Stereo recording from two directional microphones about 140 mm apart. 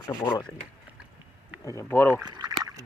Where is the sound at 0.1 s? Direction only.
25° left (ahead or behind).